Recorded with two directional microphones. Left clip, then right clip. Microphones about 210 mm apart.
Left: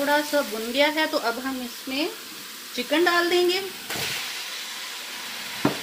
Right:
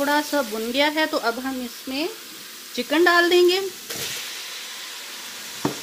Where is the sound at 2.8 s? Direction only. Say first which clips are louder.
Right 4 dB; 60° right (ahead or behind).